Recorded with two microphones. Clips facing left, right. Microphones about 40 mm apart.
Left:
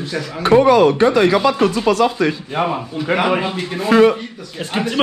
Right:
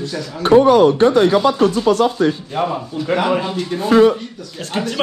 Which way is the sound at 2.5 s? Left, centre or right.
Left.